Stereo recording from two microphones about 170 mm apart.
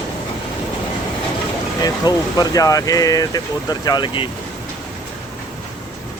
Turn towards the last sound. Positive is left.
turn(degrees=30)  # may be behind; listen again after turning